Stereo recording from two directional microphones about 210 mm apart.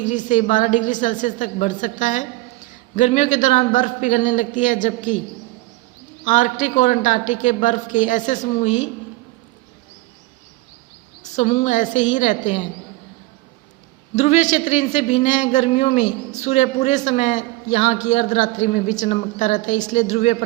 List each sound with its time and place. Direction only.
0.0 s speech: 35° left (ahead or behind)
6.2 s speech: 40° left (ahead or behind)
11.3 s speech: 30° left (ahead or behind)
14.2 s speech: 35° left (ahead or behind)